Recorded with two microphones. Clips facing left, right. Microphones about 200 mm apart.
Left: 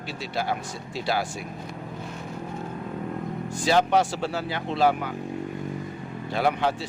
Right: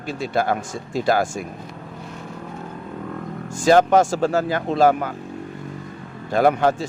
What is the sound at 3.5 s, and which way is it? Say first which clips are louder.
Speech: right 7 dB; 45° right (ahead or behind).